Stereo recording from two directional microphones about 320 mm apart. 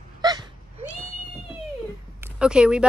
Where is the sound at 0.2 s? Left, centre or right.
Centre.